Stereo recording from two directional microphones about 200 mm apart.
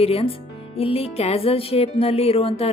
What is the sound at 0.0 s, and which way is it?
Speech, 30° left (ahead or behind).